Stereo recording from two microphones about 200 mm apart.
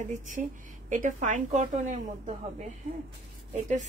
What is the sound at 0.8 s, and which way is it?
Speech, 40° right (ahead or behind).